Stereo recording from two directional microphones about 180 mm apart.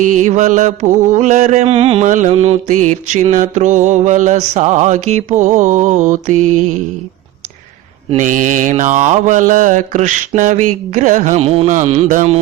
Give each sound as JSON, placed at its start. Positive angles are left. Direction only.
{"t": 0.0, "sound": "mantra", "side_deg": -45}
{"t": 8.1, "sound": "mantra", "side_deg": -45}